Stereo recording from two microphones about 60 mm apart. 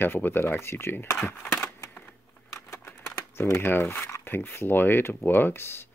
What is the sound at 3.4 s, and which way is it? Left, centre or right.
Speech, left.